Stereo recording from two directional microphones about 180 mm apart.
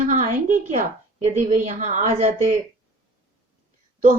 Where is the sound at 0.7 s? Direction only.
40° right (ahead or behind).